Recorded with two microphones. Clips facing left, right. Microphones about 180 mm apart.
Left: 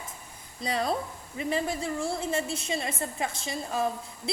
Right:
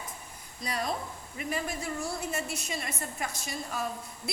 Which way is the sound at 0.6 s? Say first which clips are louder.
Left 4 dB; 30° left (ahead or behind).